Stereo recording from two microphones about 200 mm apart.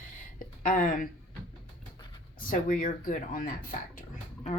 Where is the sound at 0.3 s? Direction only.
45° left (ahead or behind).